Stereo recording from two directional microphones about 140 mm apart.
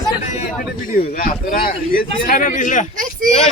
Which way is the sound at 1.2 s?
90° left.